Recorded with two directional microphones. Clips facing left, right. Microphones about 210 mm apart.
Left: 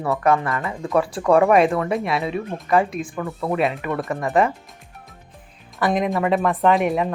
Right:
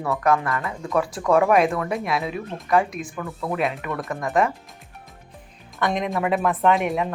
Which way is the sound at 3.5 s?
Centre (ahead or behind).